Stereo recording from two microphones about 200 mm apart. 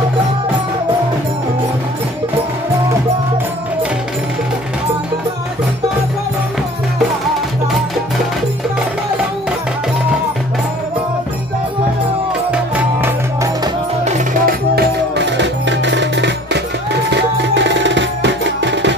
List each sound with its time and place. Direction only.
12.7 s music: 10° right (ahead or behind)
14.0 s music: 40° right (ahead or behind); by 18.9 s 60° right (ahead or behind)